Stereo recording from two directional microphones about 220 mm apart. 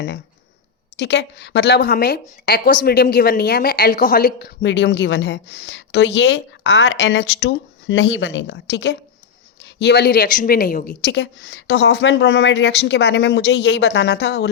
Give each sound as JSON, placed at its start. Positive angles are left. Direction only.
{"t": 0.9, "sound": "a woman's voice", "side_deg": 50}